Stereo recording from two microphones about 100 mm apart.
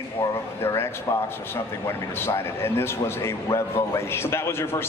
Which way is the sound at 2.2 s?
25° left (ahead or behind).